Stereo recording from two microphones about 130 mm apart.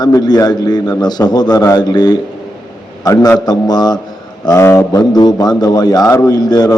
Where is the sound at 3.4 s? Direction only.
30° left (ahead or behind).